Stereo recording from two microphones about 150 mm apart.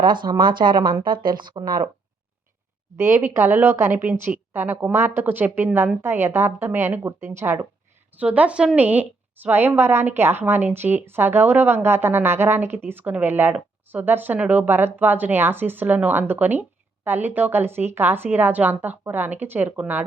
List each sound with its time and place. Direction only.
0.0 s speech: 30° right (ahead or behind)
3.0 s a woman's voice: 15° right (ahead or behind)